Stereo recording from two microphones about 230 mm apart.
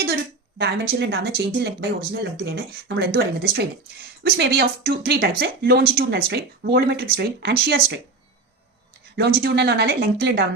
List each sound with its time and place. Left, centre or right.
0.6 s speech: right
9.1 s speech: right